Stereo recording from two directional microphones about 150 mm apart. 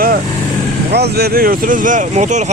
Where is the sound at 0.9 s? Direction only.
90° right; by 2.5 s 55° right (ahead or behind).